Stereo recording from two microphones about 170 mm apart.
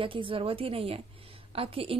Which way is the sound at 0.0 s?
30° right (ahead or behind).